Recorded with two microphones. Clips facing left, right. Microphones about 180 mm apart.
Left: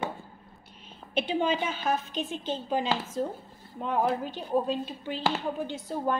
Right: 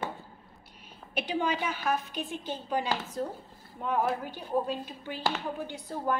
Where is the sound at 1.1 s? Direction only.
25° left (ahead or behind).